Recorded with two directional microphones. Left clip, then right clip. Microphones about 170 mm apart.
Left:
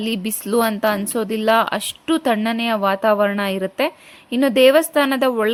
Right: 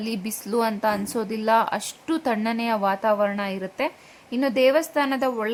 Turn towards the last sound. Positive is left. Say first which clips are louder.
# left 6 dB
turn(degrees=30)  # may be behind; listen again after turning